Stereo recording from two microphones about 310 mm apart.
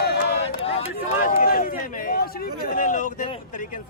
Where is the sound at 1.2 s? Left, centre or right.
Left.